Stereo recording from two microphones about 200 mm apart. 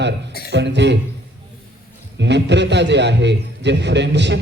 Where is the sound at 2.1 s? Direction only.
60° right (ahead or behind).